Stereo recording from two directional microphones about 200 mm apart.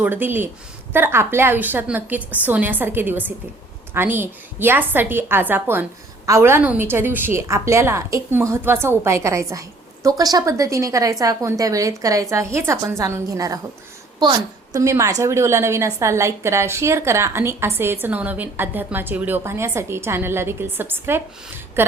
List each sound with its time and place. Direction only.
0.0 s a woman's voice: 10° right (ahead or behind)